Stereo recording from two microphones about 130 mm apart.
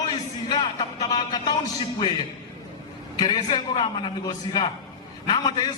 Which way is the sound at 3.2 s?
35° left (ahead or behind).